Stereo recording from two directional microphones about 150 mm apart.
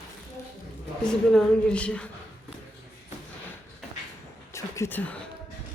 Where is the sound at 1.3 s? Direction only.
5° left (ahead or behind).